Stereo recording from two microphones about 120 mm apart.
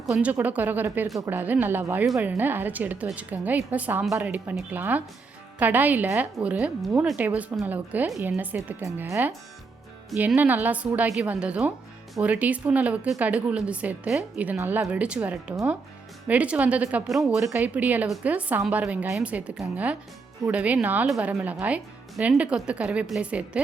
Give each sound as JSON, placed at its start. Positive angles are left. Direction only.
{"t": 0.2, "sound": "speech", "side_deg": -15}